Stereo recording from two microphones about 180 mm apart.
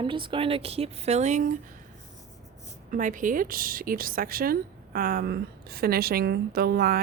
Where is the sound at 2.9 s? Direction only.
45° right (ahead or behind).